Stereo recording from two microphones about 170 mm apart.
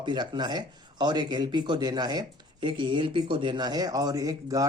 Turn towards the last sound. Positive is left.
turn(degrees=-20)  # may be behind; listen again after turning